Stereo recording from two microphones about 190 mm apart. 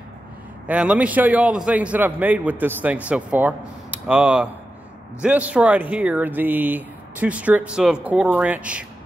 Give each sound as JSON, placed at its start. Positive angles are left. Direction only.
{"t": 0.7, "sound": "a man's voice", "side_deg": -5}